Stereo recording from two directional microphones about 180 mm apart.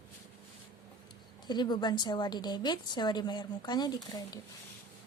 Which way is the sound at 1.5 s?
25° left (ahead or behind).